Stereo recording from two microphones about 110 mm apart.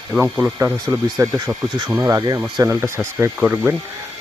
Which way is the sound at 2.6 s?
25° right (ahead or behind).